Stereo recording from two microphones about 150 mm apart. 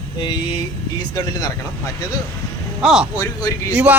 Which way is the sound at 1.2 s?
25° left (ahead or behind).